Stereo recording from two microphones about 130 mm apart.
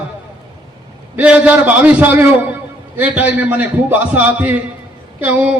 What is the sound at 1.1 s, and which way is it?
A man's voice, 10° right (ahead or behind).